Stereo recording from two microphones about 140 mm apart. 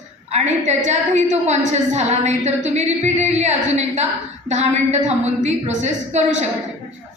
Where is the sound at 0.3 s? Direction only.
55° right (ahead or behind).